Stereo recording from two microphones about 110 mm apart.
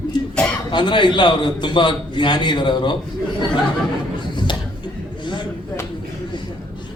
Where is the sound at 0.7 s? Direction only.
45° left (ahead or behind).